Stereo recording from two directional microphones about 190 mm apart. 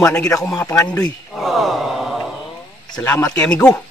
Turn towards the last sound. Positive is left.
turn(degrees=5)  # may be behind; listen again after turning